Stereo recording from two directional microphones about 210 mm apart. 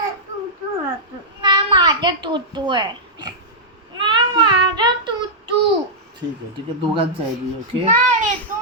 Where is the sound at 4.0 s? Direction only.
20° right (ahead or behind).